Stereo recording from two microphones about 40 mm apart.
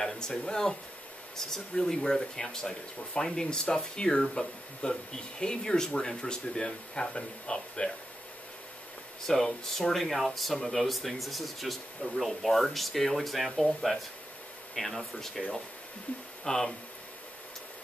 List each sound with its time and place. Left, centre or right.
0.0 s speech: centre
9.2 s speech: centre
16.4 s speech: centre